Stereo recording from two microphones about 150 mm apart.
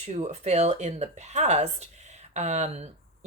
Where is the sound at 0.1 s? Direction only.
50° right (ahead or behind).